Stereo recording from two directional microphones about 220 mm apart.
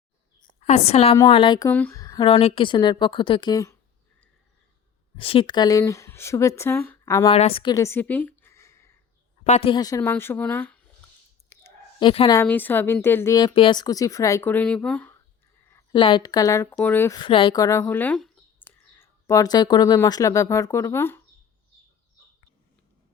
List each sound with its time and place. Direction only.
0.6 s a woman's voice: 30° left (ahead or behind)
5.1 s speech: 25° left (ahead or behind)
7.3 s speech: 25° left (ahead or behind)
9.4 s speech: 25° left (ahead or behind); by 10.8 s 5° left (ahead or behind)
11.4 s clicking: 10° left (ahead or behind)
12.0 s speech: 25° left (ahead or behind)
12.4 s speech: 10° left (ahead or behind)
15.7 s speech: 20° left (ahead or behind)